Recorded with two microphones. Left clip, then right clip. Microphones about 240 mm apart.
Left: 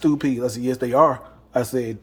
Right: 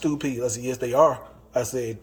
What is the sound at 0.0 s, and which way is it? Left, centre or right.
A man's voice, left.